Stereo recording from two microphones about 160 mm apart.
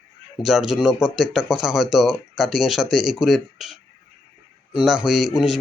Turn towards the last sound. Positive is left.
turn(degrees=-5)  # may be behind; listen again after turning